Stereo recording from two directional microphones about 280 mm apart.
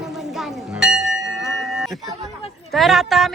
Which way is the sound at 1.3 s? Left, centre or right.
Centre.